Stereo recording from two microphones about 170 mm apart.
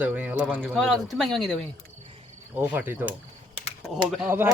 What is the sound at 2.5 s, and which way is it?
Speech, 10° right (ahead or behind).